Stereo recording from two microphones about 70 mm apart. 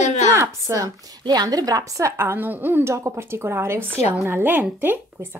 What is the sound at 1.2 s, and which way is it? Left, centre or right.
Speech, right.